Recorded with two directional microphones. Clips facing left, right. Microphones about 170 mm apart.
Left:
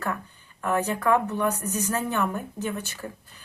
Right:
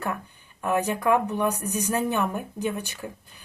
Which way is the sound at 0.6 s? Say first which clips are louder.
Right 1 dB; 15° right (ahead or behind).